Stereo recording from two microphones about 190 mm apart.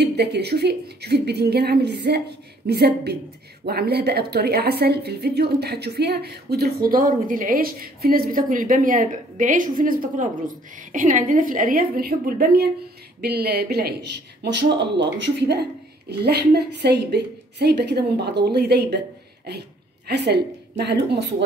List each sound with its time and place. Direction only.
0.0 s a woman's voice: 60° right (ahead or behind)
20.1 s a woman's voice: 60° right (ahead or behind)